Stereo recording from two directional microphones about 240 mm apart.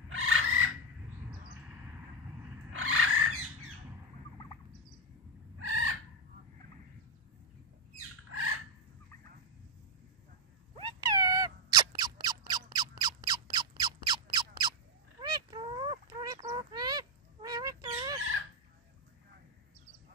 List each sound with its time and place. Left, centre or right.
0.1 s a sound: right
2.7 s frog: right
5.6 s chicken: right
10.8 s cat: centre
15.1 s duck: centre